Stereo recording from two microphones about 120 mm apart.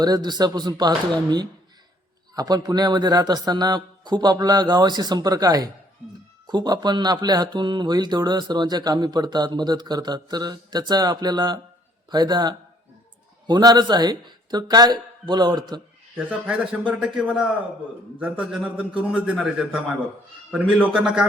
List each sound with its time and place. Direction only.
0.0 s speech: 35° right (ahead or behind)
2.3 s speech: 30° right (ahead or behind)
16.5 s a man's voice: 5° right (ahead or behind)